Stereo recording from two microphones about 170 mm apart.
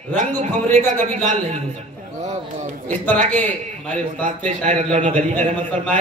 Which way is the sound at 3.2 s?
45° right (ahead or behind).